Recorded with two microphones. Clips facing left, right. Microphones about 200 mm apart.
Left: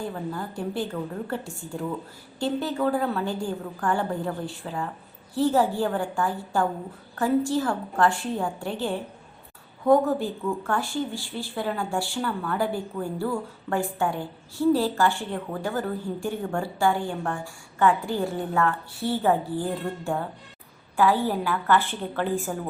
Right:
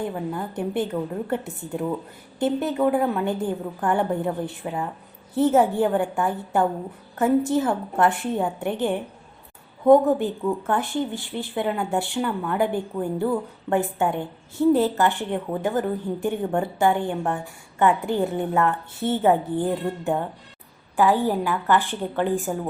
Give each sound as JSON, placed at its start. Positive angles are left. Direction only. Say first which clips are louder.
{"t": 0.0, "sound": "a woman's voice", "louder": "right 3 dB", "side_deg": -20}